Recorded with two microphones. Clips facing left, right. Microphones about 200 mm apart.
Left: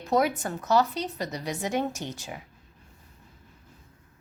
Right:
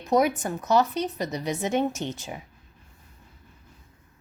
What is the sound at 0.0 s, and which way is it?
A woman's voice, 20° right (ahead or behind).